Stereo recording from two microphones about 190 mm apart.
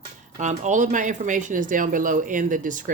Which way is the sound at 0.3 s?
40° right (ahead or behind).